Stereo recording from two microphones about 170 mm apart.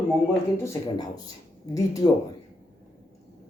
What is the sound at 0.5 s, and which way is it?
Speech, 15° left (ahead or behind).